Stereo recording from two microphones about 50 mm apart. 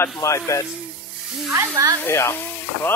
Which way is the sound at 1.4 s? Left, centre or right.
Right.